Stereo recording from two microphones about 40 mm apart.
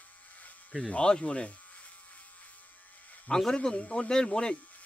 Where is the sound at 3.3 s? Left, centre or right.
Left.